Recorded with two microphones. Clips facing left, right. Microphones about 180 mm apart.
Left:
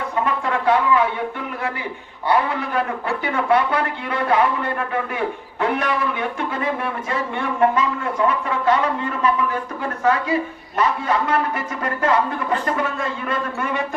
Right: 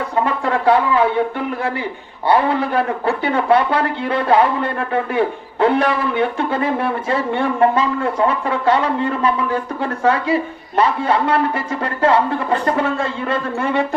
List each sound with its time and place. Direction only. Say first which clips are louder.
0.3 s a man's voice: right 3 dB; 35° right (ahead or behind)
2.2 s a man's voice: right 4 dB; 30° right (ahead or behind)